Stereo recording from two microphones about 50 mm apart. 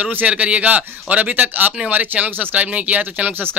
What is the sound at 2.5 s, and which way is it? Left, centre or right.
Speech, right.